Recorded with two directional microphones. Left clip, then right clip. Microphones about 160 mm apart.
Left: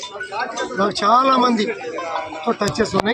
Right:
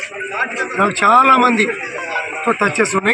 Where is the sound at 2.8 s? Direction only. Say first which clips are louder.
Right 4 dB; 20° left (ahead or behind).